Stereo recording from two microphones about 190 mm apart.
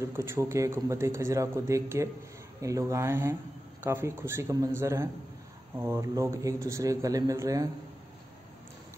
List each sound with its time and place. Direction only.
0.0 s a man's voice: 15° right (ahead or behind)